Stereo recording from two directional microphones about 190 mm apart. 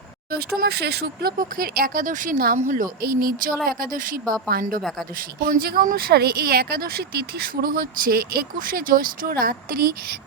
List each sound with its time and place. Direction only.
0.3 s speech: 55° right (ahead or behind)
4.8 s a woman's voice: centre (ahead or behind)
5.4 s speech: 50° right (ahead or behind)